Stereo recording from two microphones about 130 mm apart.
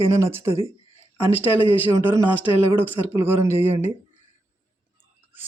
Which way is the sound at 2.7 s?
15° right (ahead or behind).